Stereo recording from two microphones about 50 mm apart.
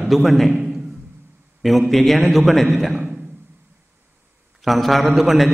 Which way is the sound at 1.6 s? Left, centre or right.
Centre.